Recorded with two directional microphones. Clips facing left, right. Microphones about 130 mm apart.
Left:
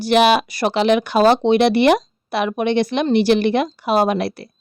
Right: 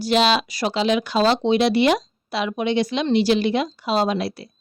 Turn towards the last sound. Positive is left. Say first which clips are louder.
# left 4 dB
turn(degrees=60)  # may be behind; listen again after turning